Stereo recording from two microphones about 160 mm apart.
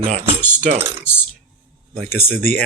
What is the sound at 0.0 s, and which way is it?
Mechanisms, 35° right (ahead or behind).